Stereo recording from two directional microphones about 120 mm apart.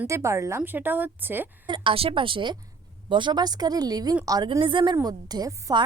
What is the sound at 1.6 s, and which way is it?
A woman's voice, 45° right (ahead or behind).